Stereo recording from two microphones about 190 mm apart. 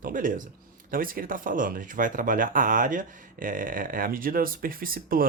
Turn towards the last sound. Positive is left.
turn(degrees=-50)  # may be behind; listen again after turning